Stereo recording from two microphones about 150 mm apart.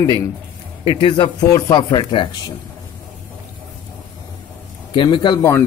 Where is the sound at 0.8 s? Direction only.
35° left (ahead or behind).